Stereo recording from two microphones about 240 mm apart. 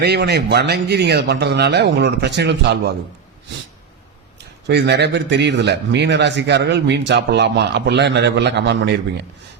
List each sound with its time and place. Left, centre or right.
0.0 s speech: right
4.4 s speech: right